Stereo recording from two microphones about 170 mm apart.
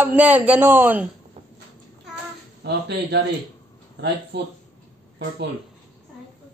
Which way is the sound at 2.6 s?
80° right.